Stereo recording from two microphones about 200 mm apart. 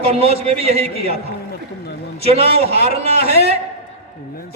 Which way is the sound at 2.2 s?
30° right (ahead or behind).